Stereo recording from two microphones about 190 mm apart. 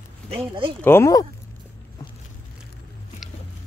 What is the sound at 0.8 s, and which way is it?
Speech, 15° left (ahead or behind).